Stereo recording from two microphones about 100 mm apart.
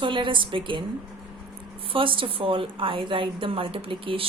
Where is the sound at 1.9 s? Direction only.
60° right (ahead or behind).